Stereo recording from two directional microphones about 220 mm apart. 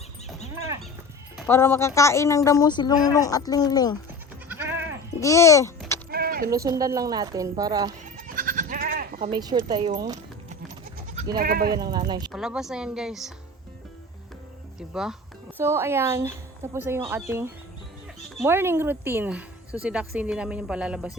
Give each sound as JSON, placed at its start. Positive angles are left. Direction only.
{"t": 1.5, "sound": "a woman's voice", "side_deg": 10}
{"t": 4.4, "sound": "goat", "side_deg": -10}
{"t": 5.2, "sound": "a woman's voice", "side_deg": 15}
{"t": 6.1, "sound": "a sound", "side_deg": -45}
{"t": 6.5, "sound": "a woman's voice", "side_deg": -15}
{"t": 8.1, "sound": "goat", "side_deg": -40}
{"t": 9.3, "sound": "speech", "side_deg": -20}
{"t": 11.3, "sound": "speech", "side_deg": -40}
{"t": 11.8, "sound": "speech", "side_deg": -20}
{"t": 12.3, "sound": "speech", "side_deg": 0}
{"t": 14.8, "sound": "a woman's voice", "side_deg": 0}